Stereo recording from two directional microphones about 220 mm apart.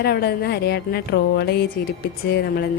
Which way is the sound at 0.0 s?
45° left (ahead or behind).